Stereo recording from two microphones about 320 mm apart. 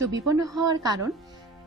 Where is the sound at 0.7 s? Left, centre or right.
Centre.